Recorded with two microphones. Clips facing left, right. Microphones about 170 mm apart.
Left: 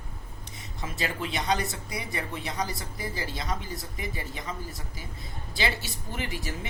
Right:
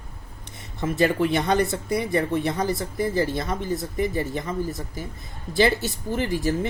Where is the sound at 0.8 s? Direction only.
55° right (ahead or behind).